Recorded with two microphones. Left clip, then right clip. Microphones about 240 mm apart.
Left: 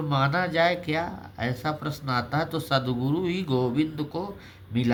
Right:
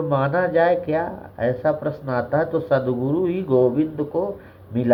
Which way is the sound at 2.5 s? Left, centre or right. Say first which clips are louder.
Right 6 dB; left.